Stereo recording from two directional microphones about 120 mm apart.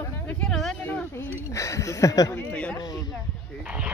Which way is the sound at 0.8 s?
15° left (ahead or behind).